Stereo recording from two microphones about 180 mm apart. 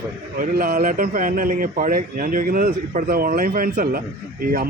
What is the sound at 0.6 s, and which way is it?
Speech, 50° right (ahead or behind).